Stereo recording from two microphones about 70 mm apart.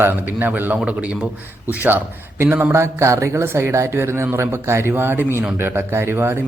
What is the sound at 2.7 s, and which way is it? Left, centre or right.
A man's voice, right.